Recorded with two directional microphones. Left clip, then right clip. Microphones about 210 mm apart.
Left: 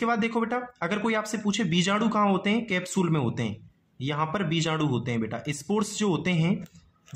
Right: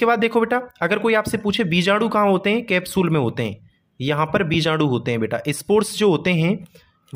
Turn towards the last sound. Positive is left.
turn(degrees=-35)  # may be behind; listen again after turning